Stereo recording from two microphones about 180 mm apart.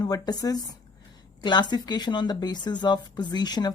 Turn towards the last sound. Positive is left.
turn(degrees=20)  # may be behind; listen again after turning